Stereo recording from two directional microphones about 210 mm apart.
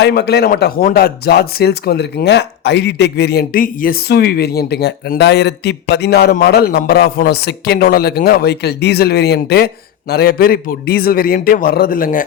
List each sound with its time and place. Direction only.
0.0 s speech: 50° left (ahead or behind)